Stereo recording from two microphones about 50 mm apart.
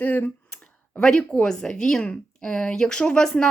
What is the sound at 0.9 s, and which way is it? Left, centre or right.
A woman's voice, centre.